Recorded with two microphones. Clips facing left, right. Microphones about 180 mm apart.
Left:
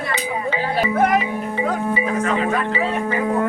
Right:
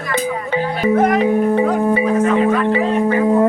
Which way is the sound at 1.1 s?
55° right (ahead or behind).